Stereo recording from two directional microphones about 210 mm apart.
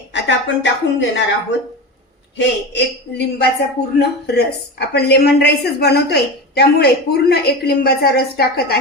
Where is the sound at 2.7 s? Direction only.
50° left (ahead or behind).